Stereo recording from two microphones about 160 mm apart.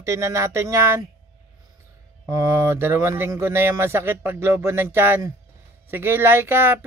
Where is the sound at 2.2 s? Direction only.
20° right (ahead or behind).